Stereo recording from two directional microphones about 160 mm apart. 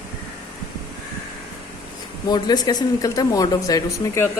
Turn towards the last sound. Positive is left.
turn(degrees=20)  # may be behind; listen again after turning